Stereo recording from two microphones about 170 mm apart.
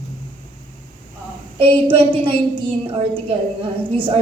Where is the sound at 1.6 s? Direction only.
30° right (ahead or behind).